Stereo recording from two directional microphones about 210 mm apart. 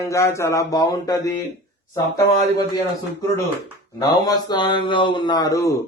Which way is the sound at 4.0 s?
20° left (ahead or behind).